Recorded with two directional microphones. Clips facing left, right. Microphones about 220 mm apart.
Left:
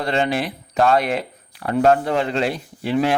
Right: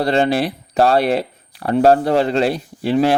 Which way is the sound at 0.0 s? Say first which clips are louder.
Right 5 dB; 35° right (ahead or behind).